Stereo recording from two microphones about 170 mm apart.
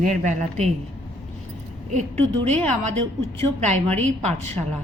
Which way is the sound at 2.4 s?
40° right (ahead or behind).